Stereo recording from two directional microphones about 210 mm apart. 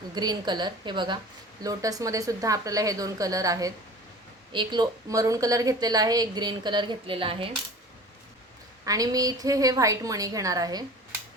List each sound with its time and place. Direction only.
0.1 s a woman's voice: 20° right (ahead or behind)
8.8 s a woman's voice: 15° right (ahead or behind)